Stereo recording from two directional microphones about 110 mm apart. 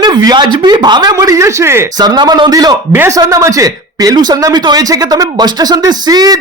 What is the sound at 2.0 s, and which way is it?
Speech, 40° right (ahead or behind).